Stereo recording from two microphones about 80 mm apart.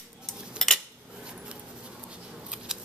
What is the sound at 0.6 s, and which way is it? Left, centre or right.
Cutlery, centre.